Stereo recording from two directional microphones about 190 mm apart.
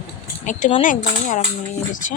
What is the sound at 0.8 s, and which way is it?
Speech, 45° left (ahead or behind).